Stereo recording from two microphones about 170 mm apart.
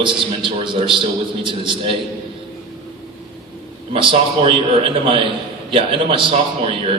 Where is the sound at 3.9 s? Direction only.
30° right (ahead or behind).